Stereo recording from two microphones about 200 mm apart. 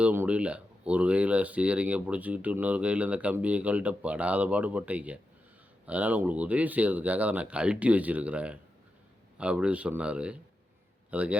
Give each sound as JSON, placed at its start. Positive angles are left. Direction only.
{"t": 0.0, "sound": "a man's voice", "side_deg": -10}